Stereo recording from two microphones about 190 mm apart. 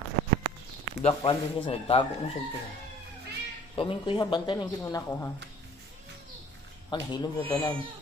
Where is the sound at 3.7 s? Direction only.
25° left (ahead or behind).